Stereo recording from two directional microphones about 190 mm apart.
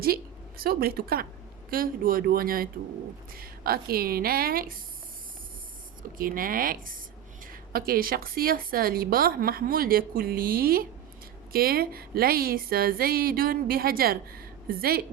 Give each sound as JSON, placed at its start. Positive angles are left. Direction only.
{"t": 0.0, "sound": "a woman's voice", "side_deg": -50}
{"t": 6.0, "sound": "a woman's voice", "side_deg": -50}